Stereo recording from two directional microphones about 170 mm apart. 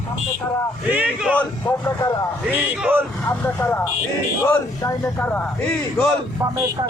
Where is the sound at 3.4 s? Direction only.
10° left (ahead or behind).